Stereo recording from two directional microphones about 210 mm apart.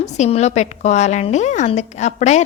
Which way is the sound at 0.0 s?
30° left (ahead or behind).